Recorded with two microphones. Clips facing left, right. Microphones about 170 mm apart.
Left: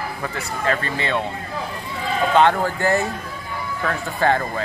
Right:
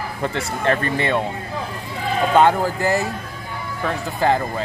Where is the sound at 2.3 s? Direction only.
10° right (ahead or behind).